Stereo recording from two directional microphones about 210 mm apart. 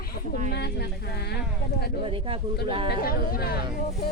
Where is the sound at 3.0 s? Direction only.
45° left (ahead or behind).